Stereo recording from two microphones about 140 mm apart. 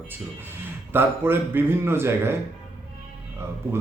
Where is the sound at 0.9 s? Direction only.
15° right (ahead or behind).